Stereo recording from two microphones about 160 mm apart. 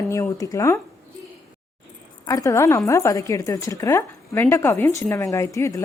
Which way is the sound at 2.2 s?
20° left (ahead or behind).